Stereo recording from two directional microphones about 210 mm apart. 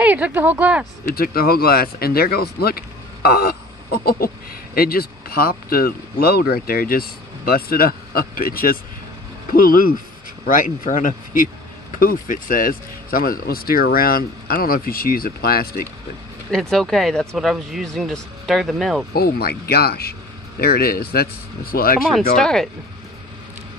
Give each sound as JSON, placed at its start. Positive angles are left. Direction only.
{"t": 0.0, "sound": "speech", "side_deg": -10}
{"t": 1.0, "sound": "speech", "side_deg": 45}
{"t": 16.7, "sound": "speech", "side_deg": 0}
{"t": 19.1, "sound": "speech", "side_deg": 45}
{"t": 22.4, "sound": "speech", "side_deg": 0}